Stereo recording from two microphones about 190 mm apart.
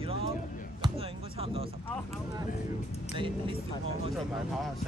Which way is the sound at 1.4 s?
30° right (ahead or behind).